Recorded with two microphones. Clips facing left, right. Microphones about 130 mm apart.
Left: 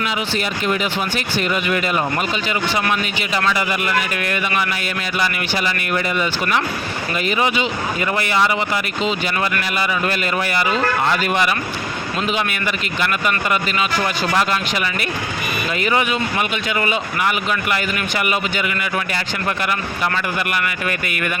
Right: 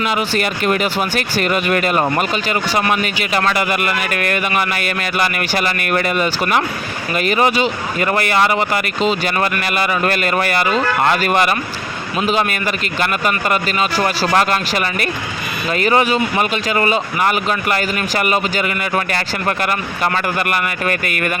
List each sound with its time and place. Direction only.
0.0 s speech: 50° right (ahead or behind)
3.5 s speech: 60° right (ahead or behind)
6.2 s speech: 45° right (ahead or behind)
12.3 s speech: 40° right (ahead or behind)
19.1 s speech: 50° right (ahead or behind)